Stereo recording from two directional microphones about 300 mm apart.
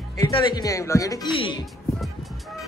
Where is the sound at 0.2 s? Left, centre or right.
Centre.